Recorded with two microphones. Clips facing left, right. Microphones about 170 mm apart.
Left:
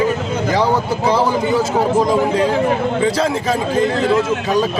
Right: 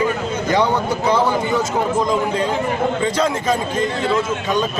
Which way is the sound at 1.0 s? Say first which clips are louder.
Left 1 dB; 30° left (ahead or behind).